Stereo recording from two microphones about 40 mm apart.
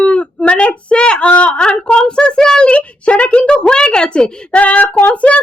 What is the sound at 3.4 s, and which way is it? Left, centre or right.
A woman's voice, left.